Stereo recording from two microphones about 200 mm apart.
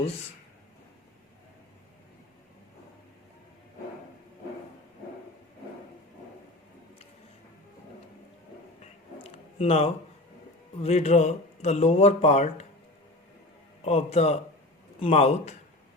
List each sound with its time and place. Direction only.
8.8 s a sound: 30° left (ahead or behind)
10.8 s speech: 30° left (ahead or behind)
13.8 s speech: 30° left (ahead or behind)